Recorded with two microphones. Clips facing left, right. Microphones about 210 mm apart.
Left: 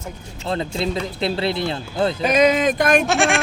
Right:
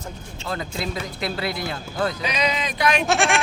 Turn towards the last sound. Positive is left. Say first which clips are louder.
# left 2 dB
turn(degrees=0)  # may be behind; listen again after turning